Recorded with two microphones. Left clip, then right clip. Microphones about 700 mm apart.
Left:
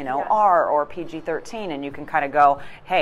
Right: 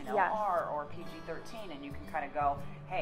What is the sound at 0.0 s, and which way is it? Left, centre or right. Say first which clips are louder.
A woman's voice: left 12 dB; left.